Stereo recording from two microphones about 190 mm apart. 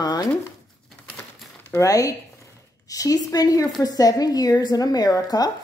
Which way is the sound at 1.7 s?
15° left (ahead or behind).